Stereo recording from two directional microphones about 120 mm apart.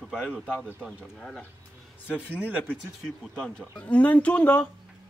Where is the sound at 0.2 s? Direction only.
10° left (ahead or behind).